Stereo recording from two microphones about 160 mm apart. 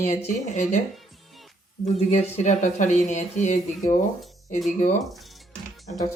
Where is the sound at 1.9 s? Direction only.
40° left (ahead or behind).